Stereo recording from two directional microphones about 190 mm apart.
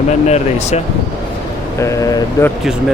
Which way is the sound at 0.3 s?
35° left (ahead or behind).